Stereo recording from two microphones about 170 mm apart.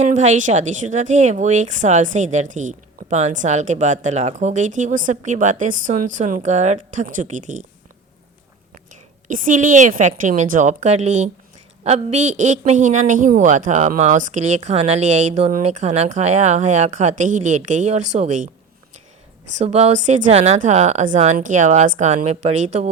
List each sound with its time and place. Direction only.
0.0 s a woman's voice: 45° right (ahead or behind)
9.2 s a woman's voice: 50° right (ahead or behind)
19.5 s a woman's voice: 40° right (ahead or behind)